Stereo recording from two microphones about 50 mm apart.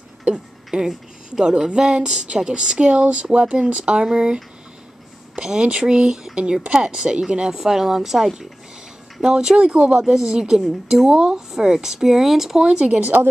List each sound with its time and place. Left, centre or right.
0.7 s speech: centre
12.6 s speech: right